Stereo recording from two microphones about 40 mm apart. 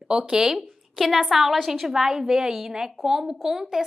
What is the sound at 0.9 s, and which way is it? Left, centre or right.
A woman's voice, centre.